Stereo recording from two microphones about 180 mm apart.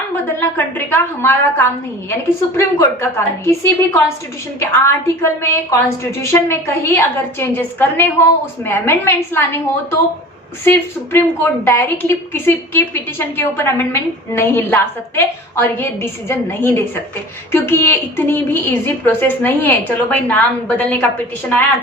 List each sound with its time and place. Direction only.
0.3 s a woman's voice: 10° left (ahead or behind)